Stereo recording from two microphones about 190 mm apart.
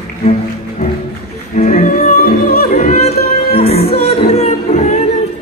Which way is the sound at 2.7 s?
35° left (ahead or behind).